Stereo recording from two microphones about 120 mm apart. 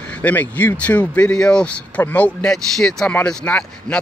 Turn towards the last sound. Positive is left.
turn(degrees=10)  # may be behind; listen again after turning